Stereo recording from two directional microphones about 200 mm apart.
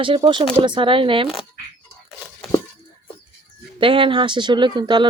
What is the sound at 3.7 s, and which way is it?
Speech, 25° right (ahead or behind).